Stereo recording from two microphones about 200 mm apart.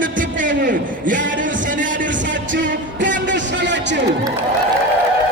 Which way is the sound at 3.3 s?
65° right (ahead or behind).